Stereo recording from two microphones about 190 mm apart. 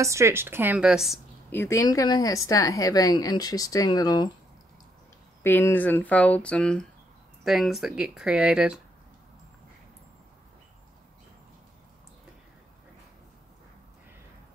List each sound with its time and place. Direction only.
0.0 s speech: 15° right (ahead or behind)
1.5 s a woman's voice: 15° left (ahead or behind)
5.4 s speech: 10° left (ahead or behind); by 8.8 s 5° right (ahead or behind)